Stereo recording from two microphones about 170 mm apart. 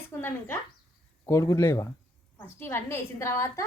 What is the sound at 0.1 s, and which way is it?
A woman's voice, 15° left (ahead or behind).